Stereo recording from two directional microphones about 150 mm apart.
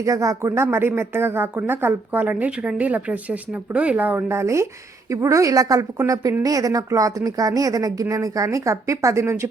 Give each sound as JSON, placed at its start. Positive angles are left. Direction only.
{"t": 0.0, "sound": "speech", "side_deg": -20}